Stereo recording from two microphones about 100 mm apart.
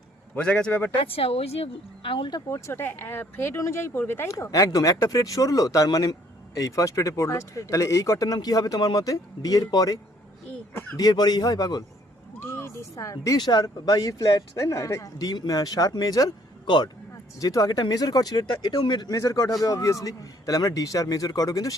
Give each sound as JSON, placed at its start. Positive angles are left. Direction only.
{"t": 0.3, "sound": "a man's voice", "side_deg": 10}
{"t": 0.9, "sound": "speech", "side_deg": 70}
{"t": 2.5, "sound": "speech", "side_deg": 25}
{"t": 12.4, "sound": "a sound", "side_deg": 25}
{"t": 13.4, "sound": "speech", "side_deg": 45}